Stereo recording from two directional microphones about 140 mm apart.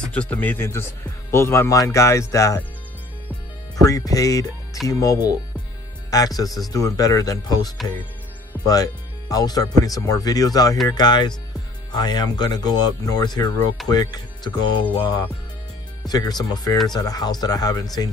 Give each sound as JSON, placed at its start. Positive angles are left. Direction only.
{"t": 0.0, "sound": "a man's voice", "side_deg": 10}
{"t": 3.8, "sound": "speech", "side_deg": 25}
{"t": 13.8, "sound": "speech", "side_deg": 0}
{"t": 14.1, "sound": "speech", "side_deg": 30}
{"t": 16.1, "sound": "speech", "side_deg": 30}